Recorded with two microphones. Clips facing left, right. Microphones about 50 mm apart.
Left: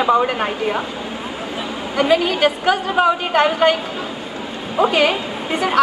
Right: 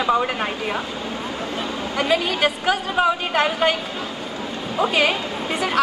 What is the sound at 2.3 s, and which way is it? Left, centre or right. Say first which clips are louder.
A woman's voice: left 4 dB; left.